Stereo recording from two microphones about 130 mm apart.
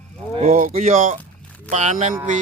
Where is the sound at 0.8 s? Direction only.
90° right.